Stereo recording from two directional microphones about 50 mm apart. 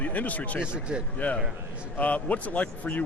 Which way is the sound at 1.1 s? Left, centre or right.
Left.